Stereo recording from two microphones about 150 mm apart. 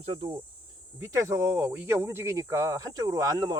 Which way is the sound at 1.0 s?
20° right (ahead or behind).